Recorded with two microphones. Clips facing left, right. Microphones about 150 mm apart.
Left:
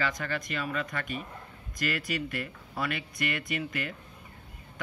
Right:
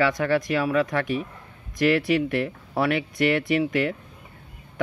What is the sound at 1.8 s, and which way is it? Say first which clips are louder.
Speech: right 12 dB; 70° right (ahead or behind).